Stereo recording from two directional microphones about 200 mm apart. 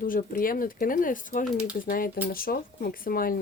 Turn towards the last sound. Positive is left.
turn(degrees=45)  # may be behind; listen again after turning